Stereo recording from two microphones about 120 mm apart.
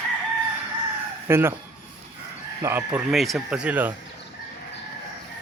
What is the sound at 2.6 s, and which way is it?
Speech, 15° right (ahead or behind).